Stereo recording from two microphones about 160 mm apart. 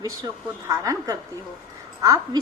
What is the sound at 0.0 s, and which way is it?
A woman's voice, 20° right (ahead or behind).